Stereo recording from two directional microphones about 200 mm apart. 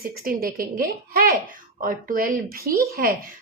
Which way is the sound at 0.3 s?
45° right (ahead or behind).